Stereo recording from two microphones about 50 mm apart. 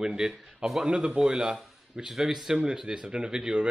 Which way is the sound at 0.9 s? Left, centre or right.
Centre.